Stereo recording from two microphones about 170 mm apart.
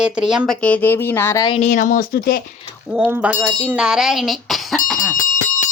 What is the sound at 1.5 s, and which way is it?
Speech, 45° left (ahead or behind).